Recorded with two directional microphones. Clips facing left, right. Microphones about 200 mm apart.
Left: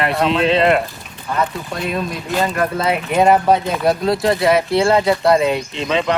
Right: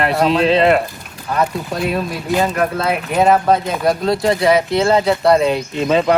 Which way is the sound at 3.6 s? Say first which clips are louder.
Even; centre (ahead or behind).